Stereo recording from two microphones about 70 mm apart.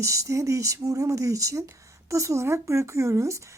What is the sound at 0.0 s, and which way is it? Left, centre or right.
A woman's voice, right.